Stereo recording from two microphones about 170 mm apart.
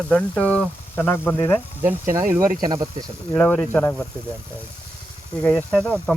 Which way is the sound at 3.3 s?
10° left (ahead or behind).